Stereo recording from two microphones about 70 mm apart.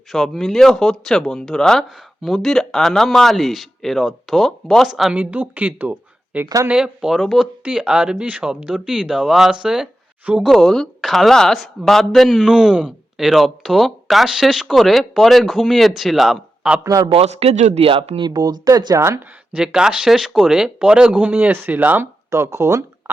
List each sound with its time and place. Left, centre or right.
0.1 s a man's voice: centre
5.1 s speech: right
6.7 s speech: centre
7.6 s speech: centre
10.5 s a man's voice: centre
16.8 s a man's voice: right
18.2 s speech: right
18.9 s speech: right
19.5 s speech: centre
21.2 s speech: right
22.0 s speech: right
23.1 s beatboxing: right